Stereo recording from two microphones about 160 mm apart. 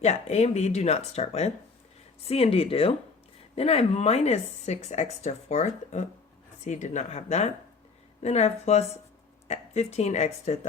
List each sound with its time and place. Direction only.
0.0 s a woman's voice: 45° left (ahead or behind)